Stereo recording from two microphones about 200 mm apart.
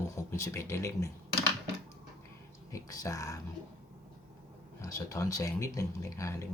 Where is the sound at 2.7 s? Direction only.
15° left (ahead or behind).